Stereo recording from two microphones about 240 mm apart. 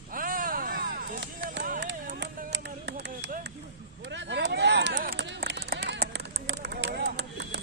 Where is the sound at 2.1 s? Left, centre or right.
Right.